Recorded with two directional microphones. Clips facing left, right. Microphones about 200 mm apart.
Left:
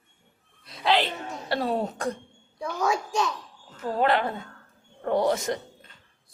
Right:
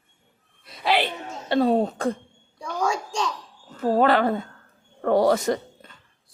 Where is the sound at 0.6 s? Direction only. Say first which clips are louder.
Even; centre (ahead or behind).